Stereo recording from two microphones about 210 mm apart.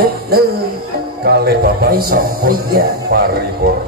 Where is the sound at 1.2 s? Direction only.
50° right (ahead or behind).